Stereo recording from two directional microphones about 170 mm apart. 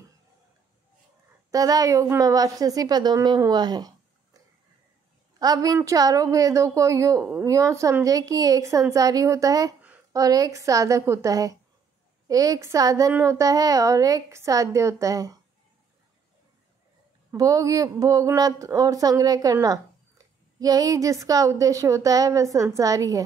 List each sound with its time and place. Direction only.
1.5 s speech: 20° right (ahead or behind)
5.4 s speech: 20° right (ahead or behind)
17.3 s speech: 20° right (ahead or behind)